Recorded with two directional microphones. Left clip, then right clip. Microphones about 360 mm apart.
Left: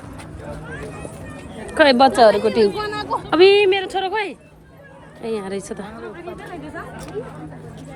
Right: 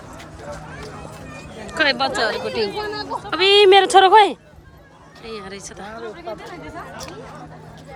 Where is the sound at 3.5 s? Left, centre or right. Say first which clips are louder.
Right 6 dB; centre.